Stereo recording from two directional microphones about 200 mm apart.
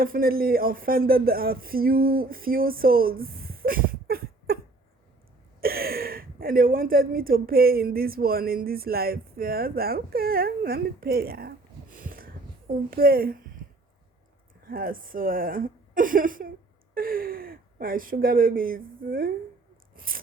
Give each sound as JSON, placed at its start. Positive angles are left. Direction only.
{"t": 0.0, "sound": "a woman's voice", "side_deg": -45}
{"t": 14.7, "sound": "speech", "side_deg": -45}